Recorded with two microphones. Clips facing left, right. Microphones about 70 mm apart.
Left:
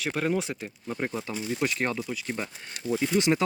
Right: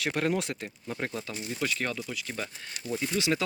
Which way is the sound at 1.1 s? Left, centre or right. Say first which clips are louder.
Left 4 dB; left.